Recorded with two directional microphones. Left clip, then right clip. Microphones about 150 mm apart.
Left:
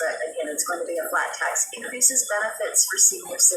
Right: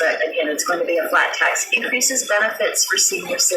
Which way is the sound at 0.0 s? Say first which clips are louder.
Right 8 dB; 15° right (ahead or behind).